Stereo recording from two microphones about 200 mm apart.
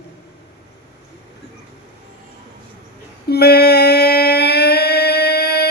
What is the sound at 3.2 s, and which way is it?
Humming, 55° left (ahead or behind).